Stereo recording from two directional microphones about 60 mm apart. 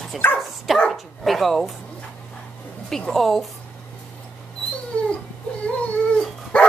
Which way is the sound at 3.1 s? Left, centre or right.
Centre.